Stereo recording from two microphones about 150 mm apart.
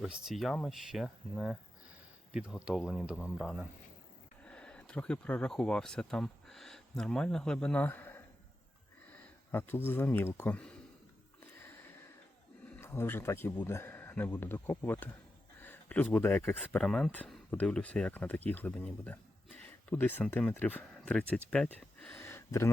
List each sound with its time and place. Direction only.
0.0 s speech: centre (ahead or behind)
12.7 s speech: 15° left (ahead or behind)
22.2 s a sound: 15° left (ahead or behind)